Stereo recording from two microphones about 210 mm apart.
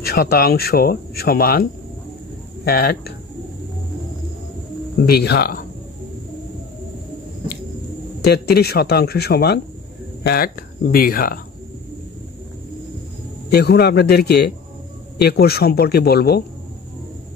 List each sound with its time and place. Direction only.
0.0 s speech: 45° left (ahead or behind)
5.0 s speech: 50° left (ahead or behind)
8.2 s speech: 50° left (ahead or behind)
13.5 s speech: 50° left (ahead or behind)